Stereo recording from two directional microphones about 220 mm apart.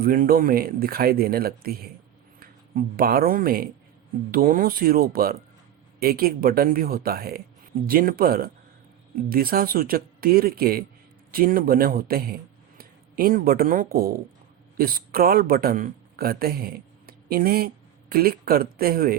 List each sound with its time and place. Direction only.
0.0 s a man's voice: 40° right (ahead or behind)